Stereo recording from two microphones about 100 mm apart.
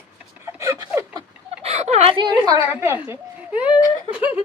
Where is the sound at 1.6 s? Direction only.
90° right.